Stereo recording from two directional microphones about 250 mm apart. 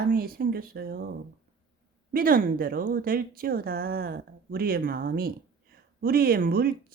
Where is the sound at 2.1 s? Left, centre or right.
Right.